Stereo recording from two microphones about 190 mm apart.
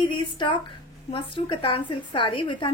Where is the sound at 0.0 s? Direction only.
25° left (ahead or behind).